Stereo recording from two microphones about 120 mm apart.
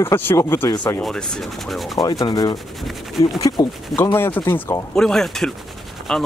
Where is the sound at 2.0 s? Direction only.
30° left (ahead or behind).